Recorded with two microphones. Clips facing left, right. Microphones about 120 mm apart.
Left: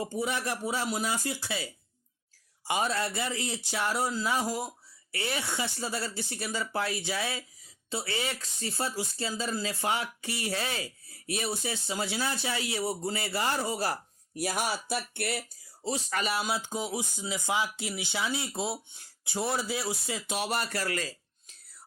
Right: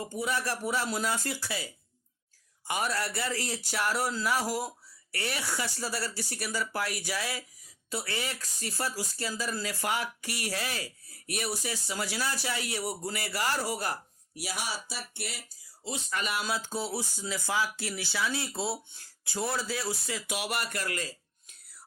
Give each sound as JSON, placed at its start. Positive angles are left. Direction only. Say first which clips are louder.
{"t": 0.1, "sound": "speech", "louder": "even", "side_deg": 25}
{"t": 14.4, "sound": "speech", "louder": "left 5 dB", "side_deg": 50}
{"t": 15.8, "sound": "speech", "louder": "left 3 dB", "side_deg": 40}
{"t": 16.4, "sound": "speech", "louder": "left 1 dB", "side_deg": 20}
{"t": 20.7, "sound": "dishes", "louder": "left 2 dB", "side_deg": 35}